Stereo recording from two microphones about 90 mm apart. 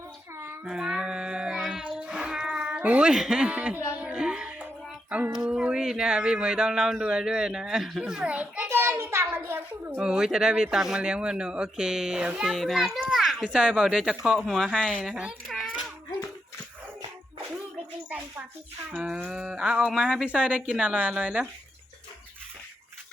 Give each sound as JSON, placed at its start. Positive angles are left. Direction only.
{"t": 0.6, "sound": "child singing", "side_deg": -10}
{"t": 3.9, "sound": "music", "side_deg": -10}
{"t": 4.6, "sound": "a sound", "side_deg": -15}
{"t": 5.3, "sound": "speech", "side_deg": -5}
{"t": 10.0, "sound": "speech", "side_deg": -5}
{"t": 12.5, "sound": "a child's voice", "side_deg": 0}
{"t": 19.1, "sound": "speech", "side_deg": -15}